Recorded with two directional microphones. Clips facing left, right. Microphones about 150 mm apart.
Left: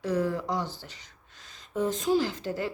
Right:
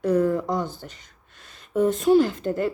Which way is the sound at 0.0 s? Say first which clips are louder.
Right 7 dB; 55° right (ahead or behind).